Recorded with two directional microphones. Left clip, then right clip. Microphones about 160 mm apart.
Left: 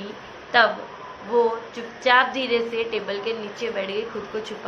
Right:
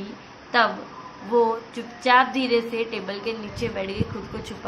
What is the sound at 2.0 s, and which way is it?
A woman's voice, 55° right (ahead or behind).